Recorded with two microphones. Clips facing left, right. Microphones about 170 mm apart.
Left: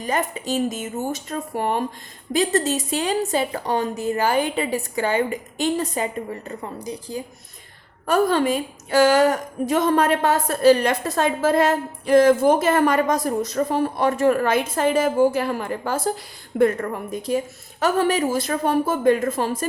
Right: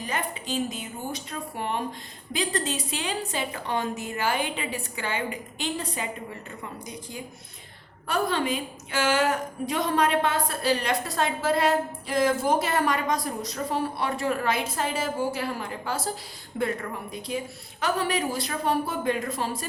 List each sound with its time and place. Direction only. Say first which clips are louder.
0.1 s a woman's voice: left 8 dB; 40° left (ahead or behind)
8.0 s a woman's voice: left 7 dB; 45° left (ahead or behind)
16.6 s a woman's voice: left 9 dB; 45° left (ahead or behind)